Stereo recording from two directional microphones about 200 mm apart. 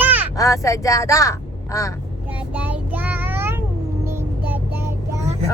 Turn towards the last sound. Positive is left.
turn(degrees=-15)  # may be behind; listen again after turning